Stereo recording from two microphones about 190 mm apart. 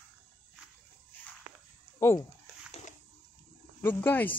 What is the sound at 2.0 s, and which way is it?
Dog, 15° left (ahead or behind).